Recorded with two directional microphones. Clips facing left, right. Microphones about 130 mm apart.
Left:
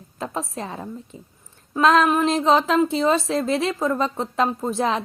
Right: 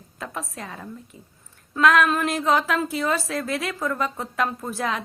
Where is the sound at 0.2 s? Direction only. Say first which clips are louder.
Left 5 dB; 30° left (ahead or behind).